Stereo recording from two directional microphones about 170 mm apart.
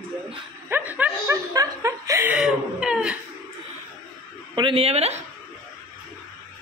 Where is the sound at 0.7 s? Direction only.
10° right (ahead or behind).